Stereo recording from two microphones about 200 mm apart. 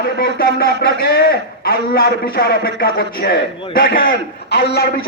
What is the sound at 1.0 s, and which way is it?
A man's voice, 50° left (ahead or behind).